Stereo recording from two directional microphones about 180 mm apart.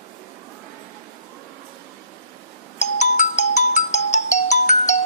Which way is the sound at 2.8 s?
40° left (ahead or behind).